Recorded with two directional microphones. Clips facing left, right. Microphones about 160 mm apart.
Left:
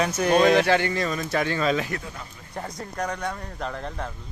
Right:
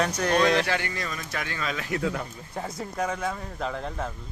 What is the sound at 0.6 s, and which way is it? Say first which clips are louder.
Speech: left 7 dB; 30° left (ahead or behind).